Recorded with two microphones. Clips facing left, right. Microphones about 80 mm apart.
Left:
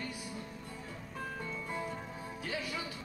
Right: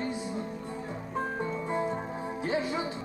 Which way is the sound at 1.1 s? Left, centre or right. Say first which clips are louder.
Right 9 dB; right.